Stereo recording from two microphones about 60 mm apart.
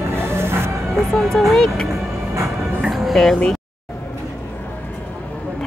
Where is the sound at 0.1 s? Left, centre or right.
Right.